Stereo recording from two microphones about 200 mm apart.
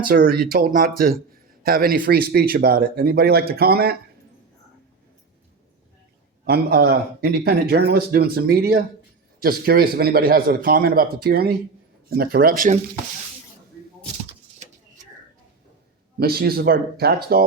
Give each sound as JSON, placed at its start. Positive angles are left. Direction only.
{"t": 0.0, "sound": "speech", "side_deg": -50}
{"t": 6.4, "sound": "speech", "side_deg": -50}
{"t": 16.2, "sound": "speech", "side_deg": -50}